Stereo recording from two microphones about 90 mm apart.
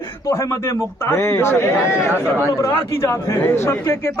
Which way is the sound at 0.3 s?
35° left (ahead or behind).